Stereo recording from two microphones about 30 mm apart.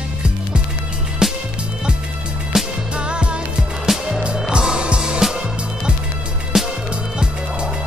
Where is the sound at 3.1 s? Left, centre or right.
Right.